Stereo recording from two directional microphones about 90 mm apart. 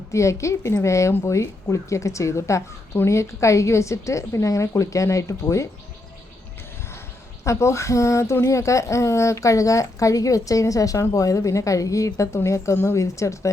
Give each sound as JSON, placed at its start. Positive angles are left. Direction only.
{"t": 0.1, "sound": "speech", "side_deg": 35}
{"t": 7.4, "sound": "speech", "side_deg": 35}